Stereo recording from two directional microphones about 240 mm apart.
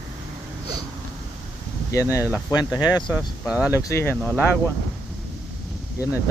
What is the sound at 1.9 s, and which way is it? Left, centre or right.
Speech, centre.